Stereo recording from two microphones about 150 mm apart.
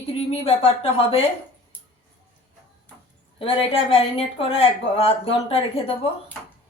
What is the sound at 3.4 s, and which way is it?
Speech, 40° left (ahead or behind).